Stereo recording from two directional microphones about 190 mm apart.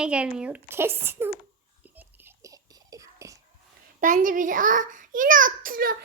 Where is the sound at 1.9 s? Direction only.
15° right (ahead or behind).